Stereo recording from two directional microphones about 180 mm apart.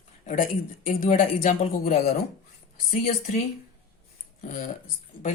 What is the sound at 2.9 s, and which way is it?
Speech, 40° left (ahead or behind).